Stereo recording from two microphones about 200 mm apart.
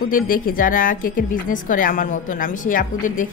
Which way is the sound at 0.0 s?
45° left (ahead or behind).